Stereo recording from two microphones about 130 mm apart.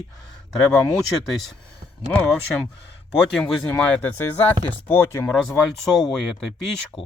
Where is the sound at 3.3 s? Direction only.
5° left (ahead or behind).